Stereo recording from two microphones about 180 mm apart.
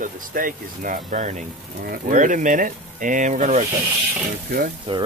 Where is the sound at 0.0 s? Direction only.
50° right (ahead or behind).